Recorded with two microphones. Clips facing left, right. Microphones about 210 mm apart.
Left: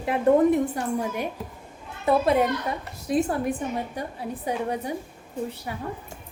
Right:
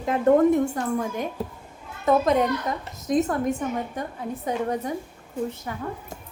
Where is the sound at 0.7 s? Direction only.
10° left (ahead or behind).